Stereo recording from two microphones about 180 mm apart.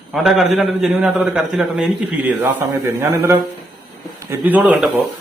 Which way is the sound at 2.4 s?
15° right (ahead or behind).